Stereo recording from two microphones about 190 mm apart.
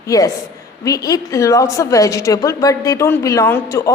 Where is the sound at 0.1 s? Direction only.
20° left (ahead or behind).